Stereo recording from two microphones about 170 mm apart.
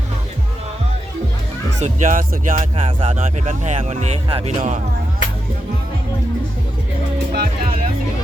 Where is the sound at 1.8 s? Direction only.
45° right (ahead or behind).